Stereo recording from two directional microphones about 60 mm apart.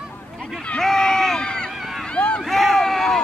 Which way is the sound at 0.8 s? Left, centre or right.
Centre.